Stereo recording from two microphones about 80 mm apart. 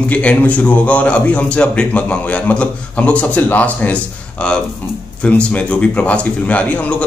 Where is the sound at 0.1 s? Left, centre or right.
Centre.